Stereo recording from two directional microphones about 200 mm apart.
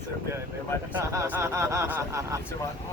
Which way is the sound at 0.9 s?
15° right (ahead or behind).